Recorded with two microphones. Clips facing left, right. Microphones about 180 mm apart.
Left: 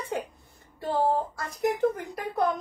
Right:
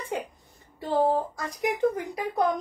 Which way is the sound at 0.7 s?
15° right (ahead or behind).